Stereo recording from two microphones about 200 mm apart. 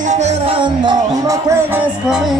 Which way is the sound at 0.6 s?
25° right (ahead or behind).